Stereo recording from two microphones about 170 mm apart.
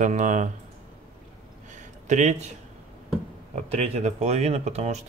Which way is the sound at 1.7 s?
45° right (ahead or behind).